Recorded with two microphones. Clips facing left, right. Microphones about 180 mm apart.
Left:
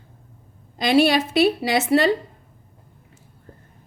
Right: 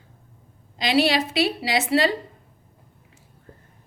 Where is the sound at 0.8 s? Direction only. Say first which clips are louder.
Left 3 dB; 55° left (ahead or behind).